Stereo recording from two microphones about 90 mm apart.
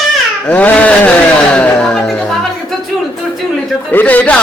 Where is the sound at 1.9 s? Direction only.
5° left (ahead or behind).